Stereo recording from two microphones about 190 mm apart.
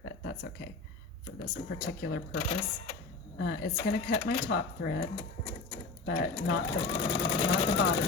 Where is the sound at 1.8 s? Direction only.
60° left (ahead or behind).